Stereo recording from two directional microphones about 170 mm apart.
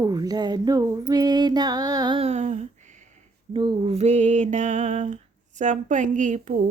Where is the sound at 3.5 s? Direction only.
30° right (ahead or behind).